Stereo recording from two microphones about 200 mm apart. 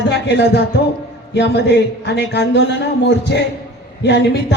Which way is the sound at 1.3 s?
60° left (ahead or behind).